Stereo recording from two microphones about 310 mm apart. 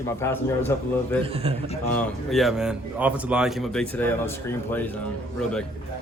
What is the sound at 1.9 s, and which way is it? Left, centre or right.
Speech, centre.